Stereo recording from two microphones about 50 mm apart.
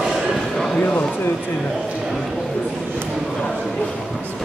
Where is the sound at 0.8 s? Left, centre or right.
Left.